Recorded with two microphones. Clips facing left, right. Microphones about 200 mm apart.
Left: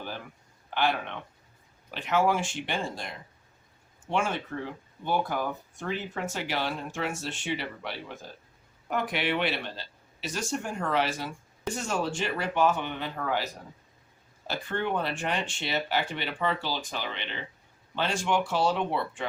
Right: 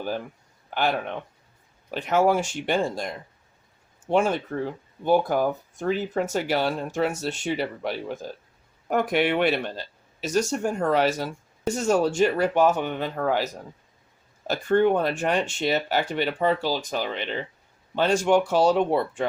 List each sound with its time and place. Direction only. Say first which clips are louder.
0.7 s speech: right 3 dB; 45° right (ahead or behind)
4.1 s speech: right 7 dB; 40° right (ahead or behind)